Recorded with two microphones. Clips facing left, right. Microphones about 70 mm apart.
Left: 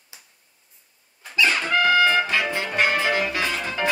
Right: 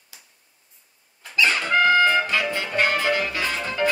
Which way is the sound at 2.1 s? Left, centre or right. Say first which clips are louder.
Even; left.